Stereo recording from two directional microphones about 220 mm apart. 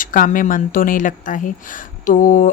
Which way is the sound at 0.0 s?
35° left (ahead or behind).